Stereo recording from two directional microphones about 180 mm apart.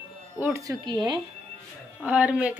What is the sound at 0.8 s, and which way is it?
Speech, 25° right (ahead or behind).